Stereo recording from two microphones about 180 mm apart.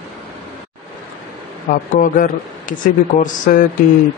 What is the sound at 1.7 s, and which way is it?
Speech, 50° left (ahead or behind).